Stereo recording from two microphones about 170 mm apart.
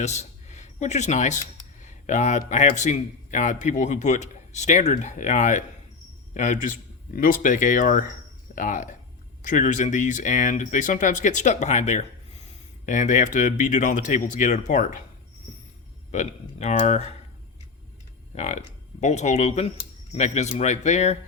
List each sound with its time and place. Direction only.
0.0 s a man's voice: 45° left (ahead or behind)
16.1 s speech: 40° left (ahead or behind)
18.3 s a man's voice: 45° left (ahead or behind)